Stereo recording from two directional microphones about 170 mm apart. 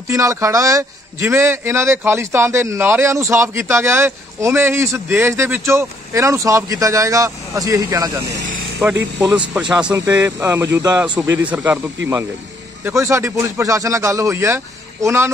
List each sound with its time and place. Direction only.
0.1 s a man's voice: 20° right (ahead or behind)
9.5 s a man's voice: 5° right (ahead or behind)
9.9 s a man's voice: 15° right (ahead or behind)
12.8 s a man's voice: 15° right (ahead or behind)